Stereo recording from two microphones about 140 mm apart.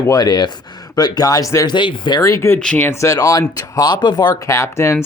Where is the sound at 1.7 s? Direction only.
35° left (ahead or behind).